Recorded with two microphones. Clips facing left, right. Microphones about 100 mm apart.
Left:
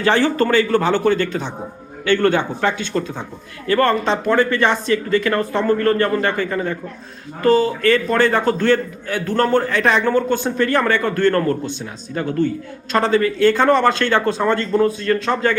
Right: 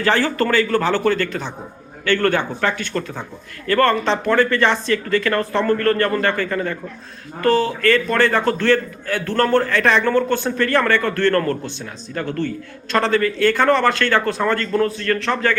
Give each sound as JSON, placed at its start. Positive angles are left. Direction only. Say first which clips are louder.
{"t": 0.0, "sound": "a man's voice", "louder": "left 2 dB", "side_deg": 20}